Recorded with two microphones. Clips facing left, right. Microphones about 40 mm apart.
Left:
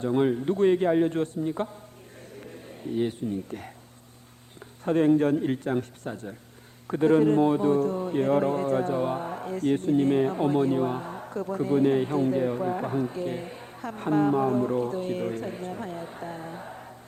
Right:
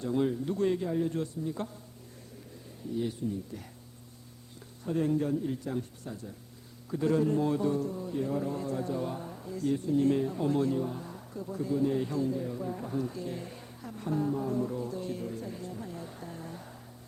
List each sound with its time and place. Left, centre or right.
0.0 s music: left
0.8 s speech: left
2.3 s speech: left
4.9 s speech: left
7.9 s speech: left
9.3 s speech: left
10.8 s speech: left
12.3 s speech: left
13.0 s music: left
13.8 s speech: left
14.5 s speech: left
15.2 s speech: left
16.0 s music: left